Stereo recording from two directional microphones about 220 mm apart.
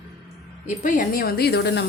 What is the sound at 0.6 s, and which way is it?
A woman's voice, 35° left (ahead or behind).